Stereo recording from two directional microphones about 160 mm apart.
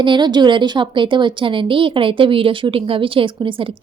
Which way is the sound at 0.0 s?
30° right (ahead or behind).